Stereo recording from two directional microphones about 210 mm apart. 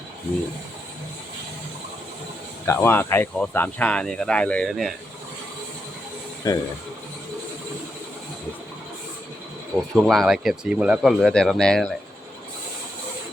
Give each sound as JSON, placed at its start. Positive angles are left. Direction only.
{"t": 2.6, "sound": "speech", "side_deg": 10}
{"t": 6.5, "sound": "speech", "side_deg": 15}
{"t": 9.9, "sound": "speech", "side_deg": 0}